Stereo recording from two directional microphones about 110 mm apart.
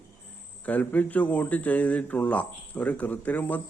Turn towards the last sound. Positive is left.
turn(degrees=15)  # may be behind; listen again after turning